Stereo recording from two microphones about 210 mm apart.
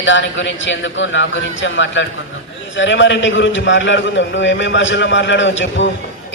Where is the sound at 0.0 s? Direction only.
60° left (ahead or behind).